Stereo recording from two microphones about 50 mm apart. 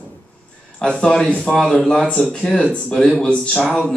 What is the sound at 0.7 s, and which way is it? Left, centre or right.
A man's voice, centre.